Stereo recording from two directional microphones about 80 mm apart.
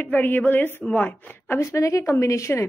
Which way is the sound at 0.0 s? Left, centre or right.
Left.